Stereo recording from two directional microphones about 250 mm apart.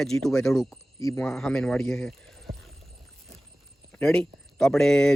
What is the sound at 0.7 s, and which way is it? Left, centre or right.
Speech, centre.